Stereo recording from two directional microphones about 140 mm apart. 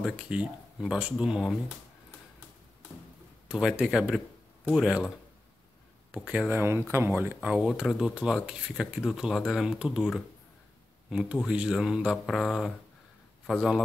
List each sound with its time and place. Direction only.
0.0 s speech: 5° right (ahead or behind)
3.4 s a man's voice: 5° right (ahead or behind)
6.1 s speech: 5° right (ahead or behind)